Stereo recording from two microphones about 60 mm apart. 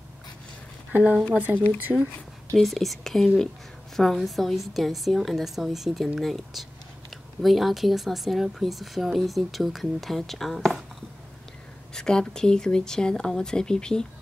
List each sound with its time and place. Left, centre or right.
1.5 s speech: right
1.9 s speech: centre
2.5 s speech: centre
11.9 s speech: centre